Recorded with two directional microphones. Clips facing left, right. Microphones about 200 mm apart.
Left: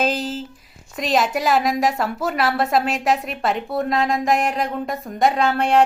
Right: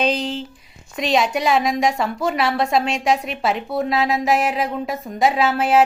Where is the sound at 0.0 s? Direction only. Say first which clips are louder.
Right 1 dB; 5° left (ahead or behind).